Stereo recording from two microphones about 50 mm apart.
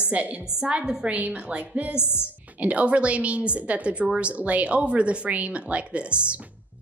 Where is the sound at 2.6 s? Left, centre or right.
Right.